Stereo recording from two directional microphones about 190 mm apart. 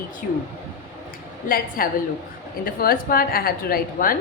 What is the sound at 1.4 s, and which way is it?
A woman's voice, 50° left (ahead or behind).